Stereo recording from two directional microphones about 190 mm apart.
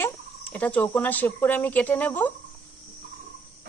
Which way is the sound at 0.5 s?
5° left (ahead or behind).